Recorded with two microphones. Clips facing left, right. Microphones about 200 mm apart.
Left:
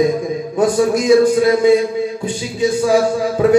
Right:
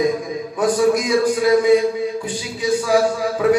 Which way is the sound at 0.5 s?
25° left (ahead or behind).